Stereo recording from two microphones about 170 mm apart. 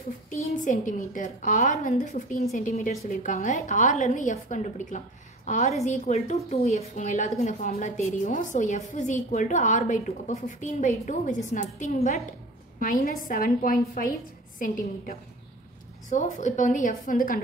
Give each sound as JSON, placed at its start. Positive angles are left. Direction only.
{"t": 0.3, "sound": "a woman's voice", "side_deg": 50}